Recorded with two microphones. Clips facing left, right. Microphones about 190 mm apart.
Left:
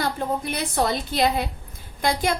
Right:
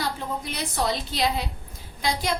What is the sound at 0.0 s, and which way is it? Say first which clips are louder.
A woman's voice: left 4 dB; 55° left (ahead or behind).